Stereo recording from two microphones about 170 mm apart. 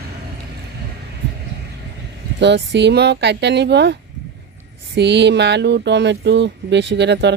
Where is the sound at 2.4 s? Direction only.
90° right.